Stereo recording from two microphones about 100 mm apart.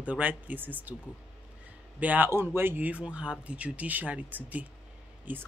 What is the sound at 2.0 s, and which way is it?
Speech, 15° right (ahead or behind).